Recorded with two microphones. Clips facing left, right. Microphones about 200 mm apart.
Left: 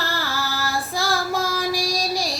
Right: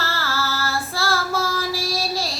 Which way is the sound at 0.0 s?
15° left (ahead or behind).